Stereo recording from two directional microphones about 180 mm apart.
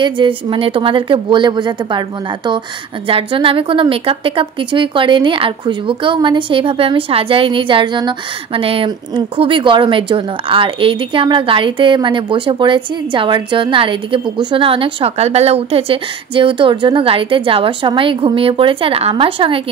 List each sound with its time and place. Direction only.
0.0 s speech: 25° right (ahead or behind)